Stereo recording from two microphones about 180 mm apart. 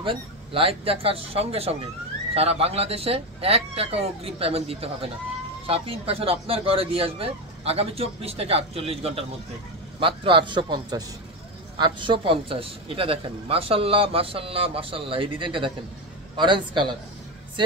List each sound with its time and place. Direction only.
0.0 s a man's voice: 30° right (ahead or behind)